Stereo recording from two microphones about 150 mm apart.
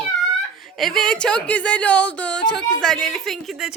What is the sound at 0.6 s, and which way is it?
A woman's voice, centre (ahead or behind).